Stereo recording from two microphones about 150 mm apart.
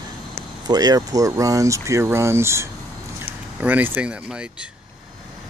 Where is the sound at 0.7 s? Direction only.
25° right (ahead or behind); by 4.5 s 5° right (ahead or behind).